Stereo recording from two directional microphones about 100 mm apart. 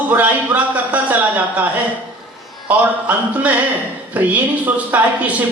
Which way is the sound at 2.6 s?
15° right (ahead or behind).